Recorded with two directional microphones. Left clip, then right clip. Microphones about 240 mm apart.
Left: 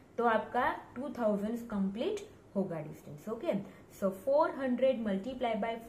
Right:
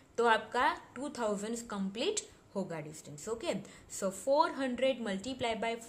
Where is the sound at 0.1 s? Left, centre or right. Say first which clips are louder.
Right 1 dB; right.